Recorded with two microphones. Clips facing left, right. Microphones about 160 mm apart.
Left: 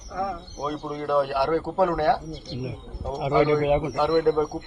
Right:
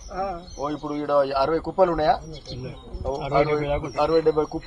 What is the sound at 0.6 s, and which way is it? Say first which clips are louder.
A man's voice: right 3 dB; 10° right (ahead or behind).